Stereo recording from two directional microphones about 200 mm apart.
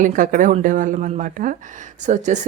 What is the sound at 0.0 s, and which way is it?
Speech, 40° right (ahead or behind).